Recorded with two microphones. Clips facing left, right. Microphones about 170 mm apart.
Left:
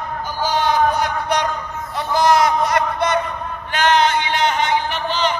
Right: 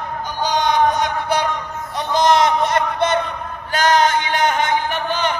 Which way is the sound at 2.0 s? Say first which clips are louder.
Even; 20° right (ahead or behind).